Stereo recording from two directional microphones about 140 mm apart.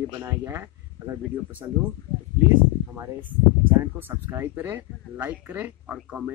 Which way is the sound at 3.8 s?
15° right (ahead or behind).